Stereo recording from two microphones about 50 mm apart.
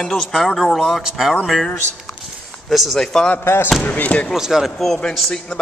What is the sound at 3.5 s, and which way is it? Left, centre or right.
Speech, left.